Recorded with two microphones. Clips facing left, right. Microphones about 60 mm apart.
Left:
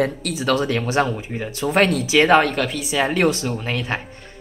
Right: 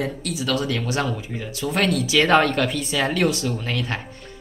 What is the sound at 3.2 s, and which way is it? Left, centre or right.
Speech, left.